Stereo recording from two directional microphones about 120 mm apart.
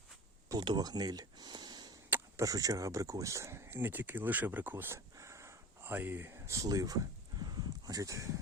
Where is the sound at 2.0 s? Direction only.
15° right (ahead or behind).